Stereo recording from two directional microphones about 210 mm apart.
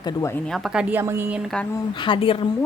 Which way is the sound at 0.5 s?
Centre (ahead or behind).